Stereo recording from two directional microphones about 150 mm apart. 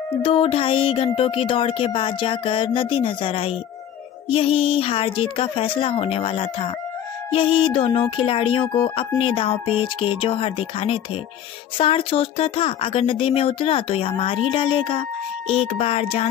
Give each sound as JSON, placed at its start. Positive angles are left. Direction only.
{"t": 0.2, "sound": "speech", "side_deg": 40}